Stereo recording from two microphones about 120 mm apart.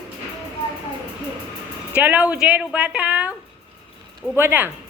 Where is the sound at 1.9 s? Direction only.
15° right (ahead or behind).